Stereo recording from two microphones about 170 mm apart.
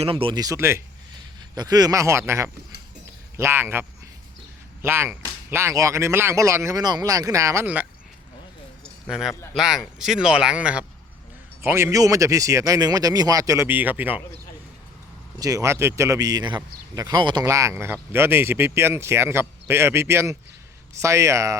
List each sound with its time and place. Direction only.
0.0 s a man's voice: 35° right (ahead or behind); by 7.9 s 10° right (ahead or behind)
9.0 s a man's voice: 5° right (ahead or behind)
15.4 s a man's voice: 20° right (ahead or behind)